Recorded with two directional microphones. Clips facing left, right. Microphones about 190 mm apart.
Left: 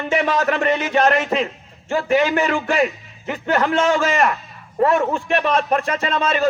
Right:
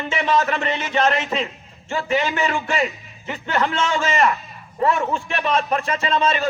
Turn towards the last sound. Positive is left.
turn(degrees=45)  # may be behind; listen again after turning